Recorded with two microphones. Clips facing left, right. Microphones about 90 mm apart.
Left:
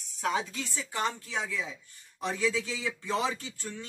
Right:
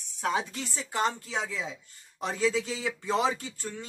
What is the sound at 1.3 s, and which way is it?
A man's voice, 25° right (ahead or behind).